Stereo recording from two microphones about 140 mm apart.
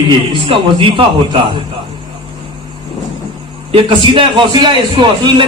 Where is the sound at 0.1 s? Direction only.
40° right (ahead or behind).